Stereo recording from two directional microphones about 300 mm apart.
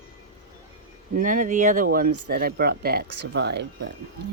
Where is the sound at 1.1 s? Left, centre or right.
Right.